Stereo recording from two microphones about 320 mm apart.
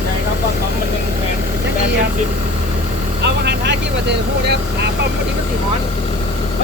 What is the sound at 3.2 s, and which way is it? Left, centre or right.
Speech, right.